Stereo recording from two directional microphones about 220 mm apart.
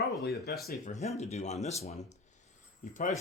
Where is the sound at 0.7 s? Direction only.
35° left (ahead or behind).